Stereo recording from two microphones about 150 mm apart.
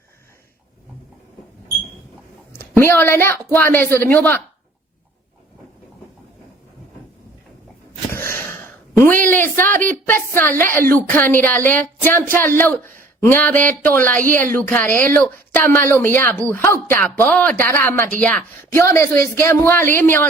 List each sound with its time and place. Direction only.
2.5 s a woman's voice: 15° left (ahead or behind)
8.1 s gasp: 15° left (ahead or behind)
9.0 s a woman's voice: 10° left (ahead or behind)